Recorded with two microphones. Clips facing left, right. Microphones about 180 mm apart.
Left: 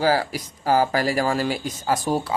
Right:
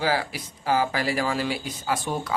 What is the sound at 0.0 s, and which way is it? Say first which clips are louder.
Speech: left 5 dB; 40° left (ahead or behind).